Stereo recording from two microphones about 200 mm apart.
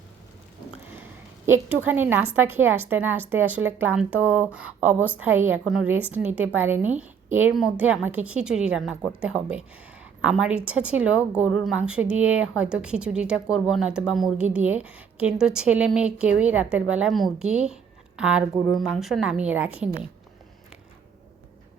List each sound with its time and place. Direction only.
1.5 s a woman's voice: 10° right (ahead or behind)